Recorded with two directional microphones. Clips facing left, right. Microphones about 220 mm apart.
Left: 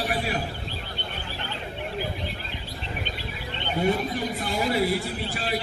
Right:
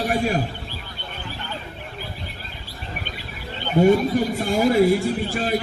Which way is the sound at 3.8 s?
45° right (ahead or behind).